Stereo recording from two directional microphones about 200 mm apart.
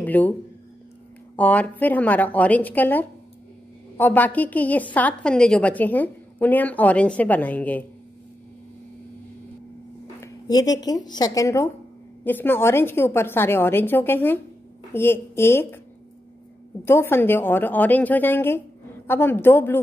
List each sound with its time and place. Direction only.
0.0 s a sound: 10° left (ahead or behind)
1.3 s a woman's voice: 5° left (ahead or behind)
10.2 s a woman's voice: 20° left (ahead or behind)
16.8 s a woman's voice: 10° left (ahead or behind)